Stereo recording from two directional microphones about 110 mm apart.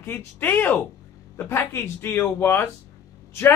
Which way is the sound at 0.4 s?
15° left (ahead or behind).